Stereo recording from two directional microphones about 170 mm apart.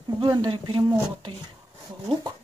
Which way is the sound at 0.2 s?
25° right (ahead or behind).